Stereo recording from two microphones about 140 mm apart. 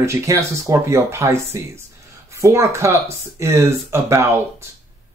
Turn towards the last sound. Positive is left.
turn(degrees=-20)  # may be behind; listen again after turning